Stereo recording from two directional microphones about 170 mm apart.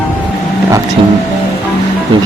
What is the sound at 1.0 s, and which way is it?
Speech, 35° right (ahead or behind).